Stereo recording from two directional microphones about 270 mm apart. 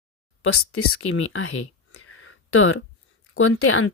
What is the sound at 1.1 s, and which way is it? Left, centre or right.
Speech, left.